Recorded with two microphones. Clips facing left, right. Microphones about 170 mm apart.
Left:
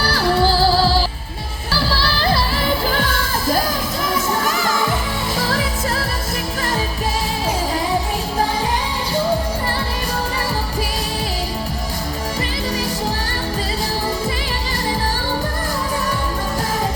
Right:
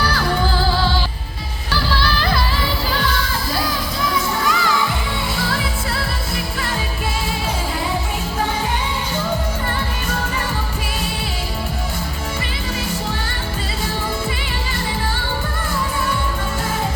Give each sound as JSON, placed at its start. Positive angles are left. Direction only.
{"t": 0.0, "sound": "music", "side_deg": 35}
{"t": 3.0, "sound": "children shouting", "side_deg": 50}
{"t": 4.1, "sound": "children playing", "side_deg": 45}